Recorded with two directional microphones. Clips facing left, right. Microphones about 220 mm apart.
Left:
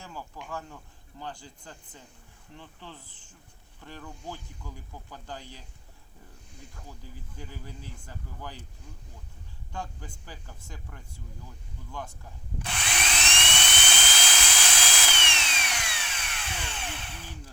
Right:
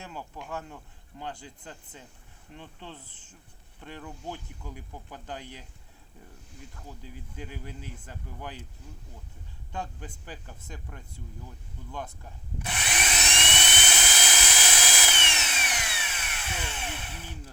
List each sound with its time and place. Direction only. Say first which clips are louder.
0.0 s a sound: right 1 dB; 20° right (ahead or behind)
1.2 s speech: right 1 dB; 20° right (ahead or behind)
6.8 s speech: right 3 dB; 15° right (ahead or behind)
12.6 s drill: right 1 dB; 10° right (ahead or behind)
13.3 s dental drill: right 1 dB; 15° right (ahead or behind)